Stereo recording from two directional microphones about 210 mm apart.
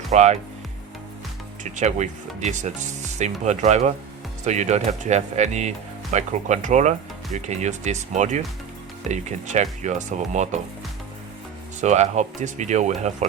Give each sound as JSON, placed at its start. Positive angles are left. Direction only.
{"t": 0.1, "sound": "speech", "side_deg": -30}
{"t": 1.6, "sound": "speech", "side_deg": -35}
{"t": 11.8, "sound": "speech", "side_deg": -35}